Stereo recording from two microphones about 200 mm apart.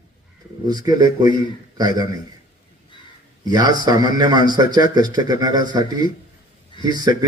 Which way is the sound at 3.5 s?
20° right (ahead or behind).